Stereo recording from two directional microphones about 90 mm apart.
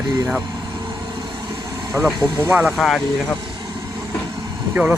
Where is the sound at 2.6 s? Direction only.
Centre (ahead or behind).